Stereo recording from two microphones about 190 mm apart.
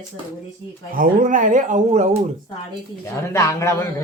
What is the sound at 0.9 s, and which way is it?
Speech, 45° right (ahead or behind).